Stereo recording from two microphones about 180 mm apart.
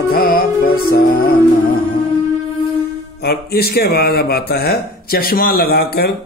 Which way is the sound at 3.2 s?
60° left (ahead or behind).